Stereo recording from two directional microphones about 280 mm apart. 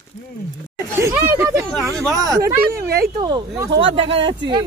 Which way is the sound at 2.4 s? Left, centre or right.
Right.